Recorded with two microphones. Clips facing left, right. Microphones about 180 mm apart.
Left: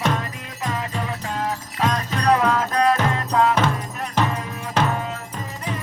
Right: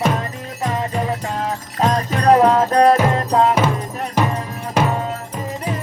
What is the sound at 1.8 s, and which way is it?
Music, 45° right (ahead or behind).